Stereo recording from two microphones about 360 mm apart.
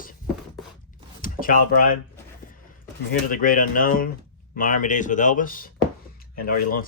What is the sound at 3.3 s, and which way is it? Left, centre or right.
Speech, left.